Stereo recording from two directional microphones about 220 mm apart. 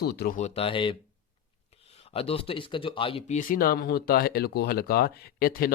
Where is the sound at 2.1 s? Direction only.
25° left (ahead or behind).